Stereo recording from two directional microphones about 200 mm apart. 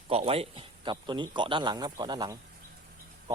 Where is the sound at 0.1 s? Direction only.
30° right (ahead or behind).